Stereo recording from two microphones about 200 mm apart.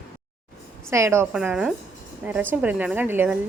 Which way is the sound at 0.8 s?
15° right (ahead or behind).